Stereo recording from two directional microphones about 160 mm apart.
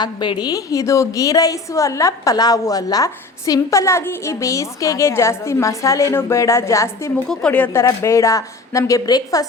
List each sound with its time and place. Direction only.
0.0 s a woman's voice: 25° left (ahead or behind)
7.3 s a woman's voice: 5° left (ahead or behind); by 9.5 s 25° left (ahead or behind)